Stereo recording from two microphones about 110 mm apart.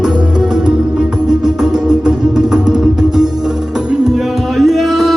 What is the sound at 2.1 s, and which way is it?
Music, 5° right (ahead or behind).